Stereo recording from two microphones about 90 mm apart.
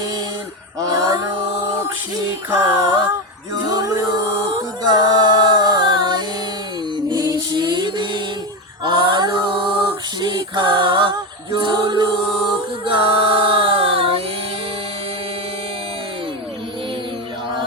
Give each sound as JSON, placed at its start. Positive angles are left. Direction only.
{"t": 0.8, "sound": "a sound", "side_deg": -40}
{"t": 2.5, "sound": "music", "side_deg": -35}
{"t": 8.8, "sound": "mantra", "side_deg": -60}
{"t": 10.2, "sound": "a capella", "side_deg": -60}
{"t": 11.1, "sound": "music", "side_deg": -60}
{"t": 12.8, "sound": "music", "side_deg": -75}